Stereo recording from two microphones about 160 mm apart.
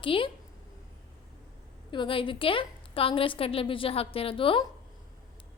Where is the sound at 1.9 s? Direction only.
30° left (ahead or behind).